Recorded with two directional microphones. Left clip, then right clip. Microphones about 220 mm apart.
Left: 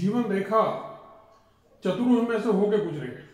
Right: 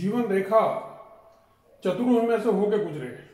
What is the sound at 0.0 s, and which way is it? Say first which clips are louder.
Speech: right 2 dB; centre (ahead or behind).